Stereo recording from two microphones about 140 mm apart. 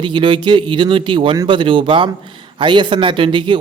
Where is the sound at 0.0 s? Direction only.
35° right (ahead or behind).